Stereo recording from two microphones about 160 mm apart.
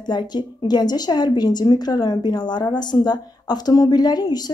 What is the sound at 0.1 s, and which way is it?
A woman's voice, 25° left (ahead or behind).